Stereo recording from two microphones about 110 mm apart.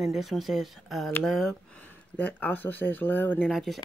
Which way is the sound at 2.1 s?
15° left (ahead or behind).